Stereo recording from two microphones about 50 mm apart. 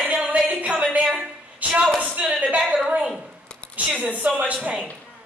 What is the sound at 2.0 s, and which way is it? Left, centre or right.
A woman's voice, right.